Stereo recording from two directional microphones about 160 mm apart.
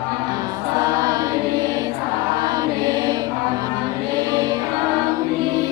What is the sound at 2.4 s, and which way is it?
Music, 25° right (ahead or behind).